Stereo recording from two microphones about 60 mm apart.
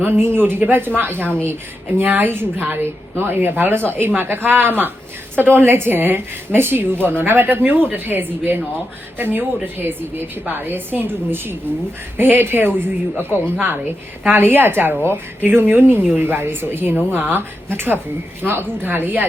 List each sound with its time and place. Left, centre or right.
0.0 s a woman's voice: right
1.1 s a woman's voice: left
2.0 s a woman's voice: right